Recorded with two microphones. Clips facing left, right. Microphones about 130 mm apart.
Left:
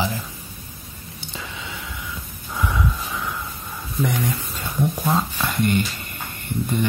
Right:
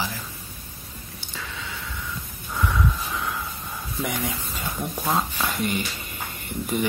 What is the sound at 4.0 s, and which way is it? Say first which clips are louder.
Speech: left 5 dB; 10° right (ahead or behind).